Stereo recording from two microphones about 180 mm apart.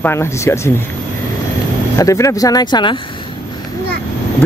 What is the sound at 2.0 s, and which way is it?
Speech, 15° left (ahead or behind).